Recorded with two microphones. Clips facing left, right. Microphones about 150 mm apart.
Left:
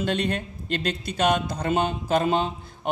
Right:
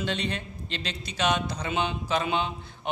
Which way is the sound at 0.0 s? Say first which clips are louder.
Left 5 dB; 50° left (ahead or behind).